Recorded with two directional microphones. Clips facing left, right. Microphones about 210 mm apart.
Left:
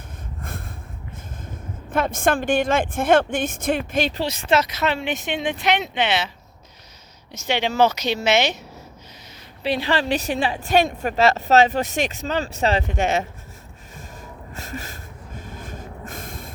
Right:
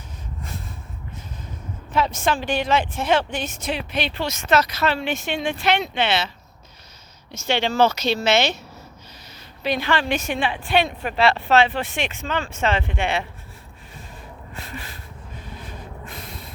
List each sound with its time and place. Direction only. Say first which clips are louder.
1.9 s a woman's voice: left 1 dB; 50° left (ahead or behind)
4.2 s speech: even; 30° left (ahead or behind)
7.4 s speech: even; 15° left (ahead or behind)
9.6 s a woman's voice: left 1 dB; 35° left (ahead or behind)
14.2 s a sound: left 1 dB; 45° left (ahead or behind)
15.4 s snort: left 2 dB; 45° left (ahead or behind)